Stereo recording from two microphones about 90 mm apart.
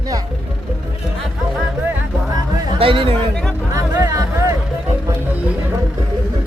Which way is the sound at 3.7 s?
35° right (ahead or behind).